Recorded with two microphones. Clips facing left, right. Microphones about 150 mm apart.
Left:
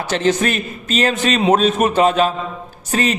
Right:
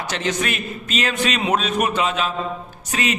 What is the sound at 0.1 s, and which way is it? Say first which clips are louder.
A man's voice: left 8 dB; 35° left (ahead or behind).